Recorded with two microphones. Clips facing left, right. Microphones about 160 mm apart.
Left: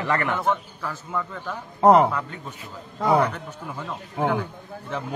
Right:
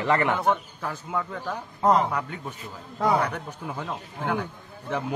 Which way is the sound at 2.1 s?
15° right (ahead or behind).